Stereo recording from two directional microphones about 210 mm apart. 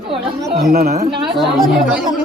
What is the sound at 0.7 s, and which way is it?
Speech, 40° right (ahead or behind).